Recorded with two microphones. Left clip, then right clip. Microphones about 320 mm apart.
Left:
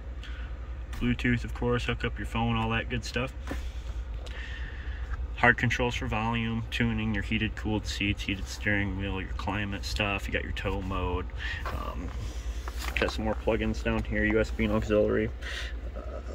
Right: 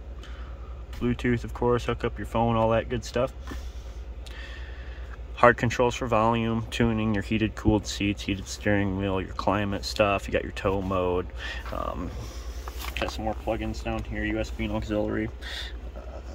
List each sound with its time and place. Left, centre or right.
1.0 s speech: centre
5.4 s speech: centre
12.9 s speech: centre